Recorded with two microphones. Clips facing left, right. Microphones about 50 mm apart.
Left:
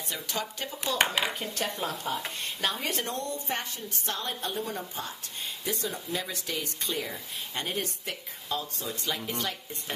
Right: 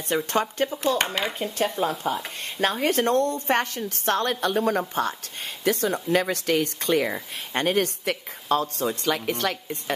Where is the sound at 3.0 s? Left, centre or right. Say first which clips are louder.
Right 11 dB; right.